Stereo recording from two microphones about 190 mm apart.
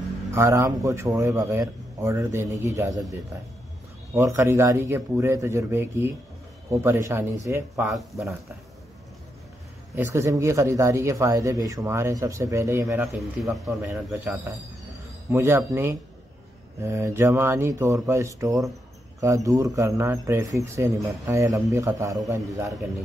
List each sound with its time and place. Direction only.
0.3 s speech: 15° right (ahead or behind)
7.8 s speech: centre (ahead or behind)
9.9 s speech: 15° right (ahead or behind)
13.0 s speech: centre (ahead or behind)
15.3 s speech: 15° right (ahead or behind)